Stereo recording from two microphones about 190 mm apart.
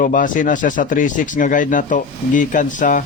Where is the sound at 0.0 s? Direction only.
45° left (ahead or behind).